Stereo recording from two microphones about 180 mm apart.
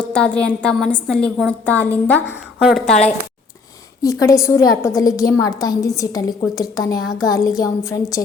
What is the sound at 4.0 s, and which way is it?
A woman's voice, 20° left (ahead or behind).